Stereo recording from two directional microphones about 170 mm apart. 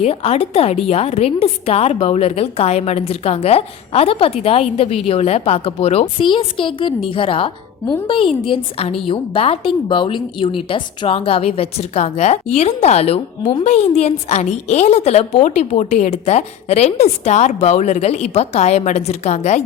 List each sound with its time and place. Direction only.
0.0 s a woman's voice: 35° left (ahead or behind)